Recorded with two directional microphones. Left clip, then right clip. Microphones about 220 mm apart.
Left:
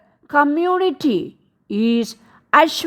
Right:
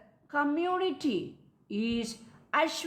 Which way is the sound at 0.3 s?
50° left (ahead or behind).